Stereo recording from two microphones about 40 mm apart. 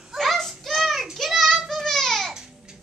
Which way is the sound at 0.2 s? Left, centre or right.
Centre.